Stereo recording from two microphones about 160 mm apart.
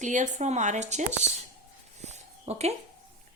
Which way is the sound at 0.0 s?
50° right (ahead or behind).